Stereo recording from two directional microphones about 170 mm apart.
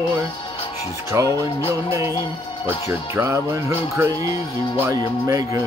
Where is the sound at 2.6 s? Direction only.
15° right (ahead or behind).